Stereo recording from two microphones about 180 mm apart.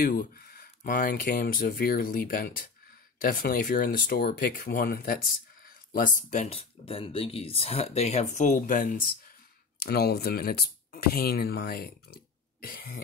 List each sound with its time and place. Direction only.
0.0 s speech: 55° left (ahead or behind)
9.8 s speech: 60° left (ahead or behind)